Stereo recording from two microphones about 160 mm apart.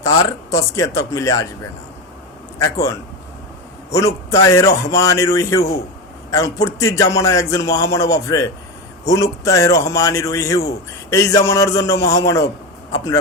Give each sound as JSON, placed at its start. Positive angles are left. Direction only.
{"t": 0.5, "sound": "speech", "side_deg": 20}
{"t": 2.6, "sound": "a man's voice", "side_deg": 20}